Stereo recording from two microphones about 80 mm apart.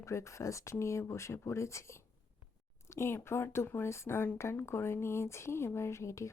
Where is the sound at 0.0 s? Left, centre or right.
Left.